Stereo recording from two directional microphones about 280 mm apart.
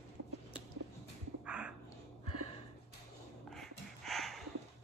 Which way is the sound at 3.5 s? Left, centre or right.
Centre.